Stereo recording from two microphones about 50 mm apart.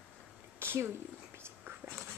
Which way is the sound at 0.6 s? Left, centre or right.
Right.